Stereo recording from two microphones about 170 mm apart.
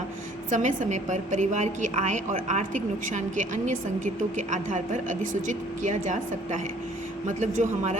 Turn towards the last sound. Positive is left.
turn(degrees=-45)  # may be behind; listen again after turning